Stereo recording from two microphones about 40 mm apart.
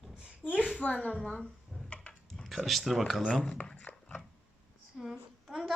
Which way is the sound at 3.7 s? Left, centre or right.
Left.